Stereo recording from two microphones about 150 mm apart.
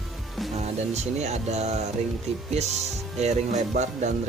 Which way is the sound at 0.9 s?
45° right (ahead or behind).